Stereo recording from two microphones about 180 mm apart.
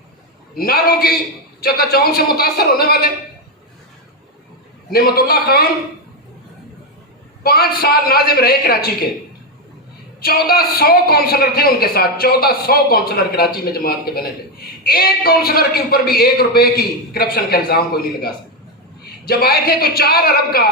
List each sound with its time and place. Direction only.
0.5 s a man's voice: 55° left (ahead or behind)
4.9 s a man's voice: 55° left (ahead or behind)
7.4 s a man's voice: 55° left (ahead or behind)
10.2 s a man's voice: 60° left (ahead or behind)